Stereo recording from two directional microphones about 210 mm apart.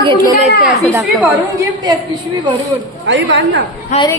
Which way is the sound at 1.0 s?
10° right (ahead or behind).